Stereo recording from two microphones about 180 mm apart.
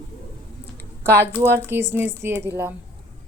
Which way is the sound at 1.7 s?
15° right (ahead or behind).